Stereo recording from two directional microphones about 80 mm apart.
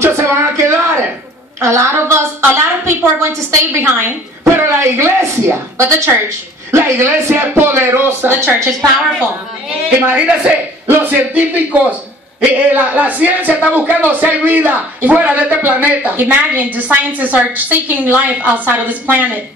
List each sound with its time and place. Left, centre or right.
0.0 s a woman's voice: right
9.9 s speech: right
12.5 s speech: centre